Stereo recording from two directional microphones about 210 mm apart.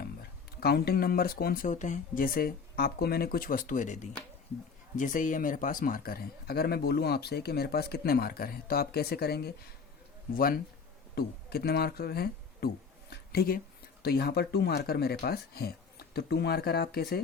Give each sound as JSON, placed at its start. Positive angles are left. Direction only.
{"t": 0.0, "sound": "speech", "side_deg": 45}